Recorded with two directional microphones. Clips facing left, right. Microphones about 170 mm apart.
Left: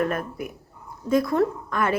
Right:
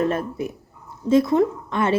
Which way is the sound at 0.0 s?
25° right (ahead or behind).